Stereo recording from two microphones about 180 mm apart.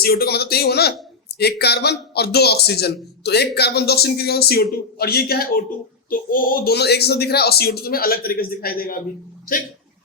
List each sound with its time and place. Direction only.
0.0 s a man's voice: 60° left (ahead or behind)